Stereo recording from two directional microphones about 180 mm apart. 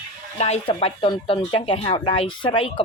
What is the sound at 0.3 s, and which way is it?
Speech, 35° left (ahead or behind).